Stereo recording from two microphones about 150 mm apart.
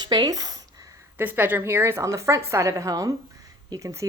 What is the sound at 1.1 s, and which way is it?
A woman's voice, 15° right (ahead or behind).